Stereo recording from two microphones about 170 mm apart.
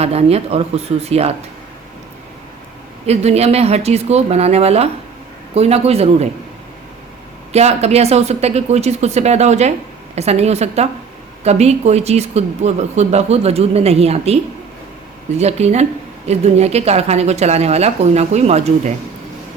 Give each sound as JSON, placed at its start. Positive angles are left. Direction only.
{"t": 0.0, "sound": "a woman's voice", "side_deg": -35}
{"t": 3.1, "sound": "a woman's voice", "side_deg": -40}
{"t": 7.5, "sound": "a woman's voice", "side_deg": -40}
{"t": 15.4, "sound": "a woman's voice", "side_deg": -40}